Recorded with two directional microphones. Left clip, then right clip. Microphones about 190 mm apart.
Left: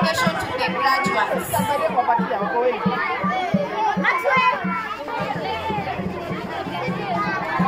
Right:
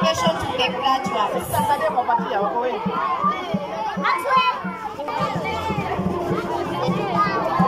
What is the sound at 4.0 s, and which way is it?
Chatter, 35° left (ahead or behind).